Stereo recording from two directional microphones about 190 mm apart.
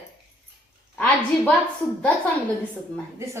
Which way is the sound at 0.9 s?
5° left (ahead or behind).